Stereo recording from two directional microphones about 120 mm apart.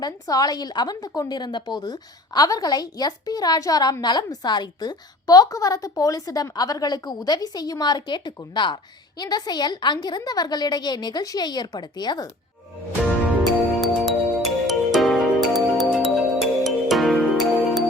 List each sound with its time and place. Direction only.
0.0 s a woman's voice: 30° left (ahead or behind)
13.7 s music: centre (ahead or behind)